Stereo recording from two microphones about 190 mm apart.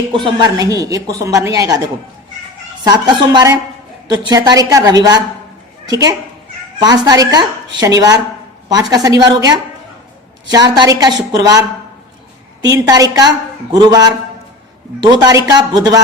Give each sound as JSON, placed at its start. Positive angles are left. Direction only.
{"t": 0.1, "sound": "speech", "side_deg": -25}
{"t": 2.8, "sound": "speech", "side_deg": -20}
{"t": 12.6, "sound": "speech", "side_deg": -20}